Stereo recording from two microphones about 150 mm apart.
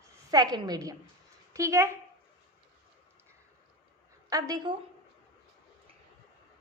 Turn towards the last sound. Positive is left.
turn(degrees=-30)  # may be behind; listen again after turning